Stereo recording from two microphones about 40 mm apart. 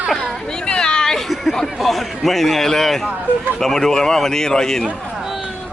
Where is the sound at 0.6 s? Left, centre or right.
Centre.